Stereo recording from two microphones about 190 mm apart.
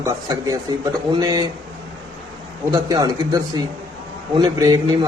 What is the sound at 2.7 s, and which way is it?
A man's voice, 20° right (ahead or behind).